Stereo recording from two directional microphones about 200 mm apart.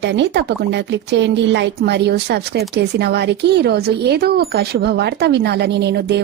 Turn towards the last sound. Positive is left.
turn(degrees=-55)  # may be behind; listen again after turning